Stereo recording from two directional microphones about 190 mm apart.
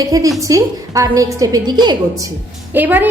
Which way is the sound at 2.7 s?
10° right (ahead or behind).